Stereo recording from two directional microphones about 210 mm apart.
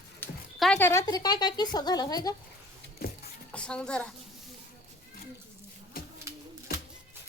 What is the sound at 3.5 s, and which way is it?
Speech, 5° left (ahead or behind).